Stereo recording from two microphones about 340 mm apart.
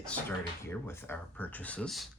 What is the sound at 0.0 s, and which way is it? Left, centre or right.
Speech, centre.